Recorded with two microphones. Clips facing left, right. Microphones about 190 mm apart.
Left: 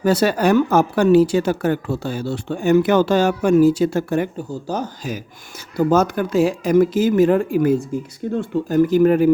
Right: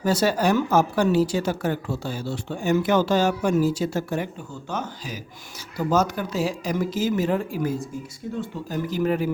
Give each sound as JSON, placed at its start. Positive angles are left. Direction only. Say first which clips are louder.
{"t": 0.0, "sound": "a woman's voice", "louder": "left 5 dB", "side_deg": 65}
{"t": 4.4, "sound": "speech", "louder": "left 7 dB", "side_deg": 35}
{"t": 5.7, "sound": "a woman's voice", "louder": "left 6 dB", "side_deg": 55}